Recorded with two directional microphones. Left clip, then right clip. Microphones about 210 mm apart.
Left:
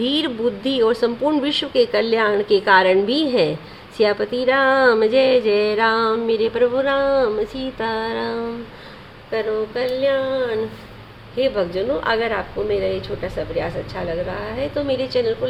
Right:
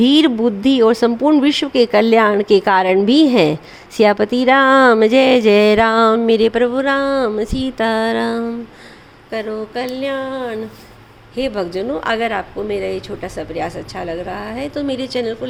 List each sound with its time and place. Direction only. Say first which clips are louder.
0.0 s speech: right 7 dB; 45° right (ahead or behind)